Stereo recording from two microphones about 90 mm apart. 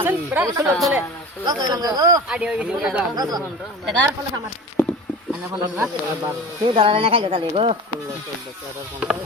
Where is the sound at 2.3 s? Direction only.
10° right (ahead or behind).